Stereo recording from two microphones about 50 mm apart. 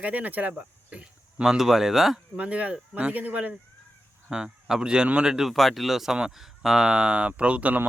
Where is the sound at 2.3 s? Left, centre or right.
Right.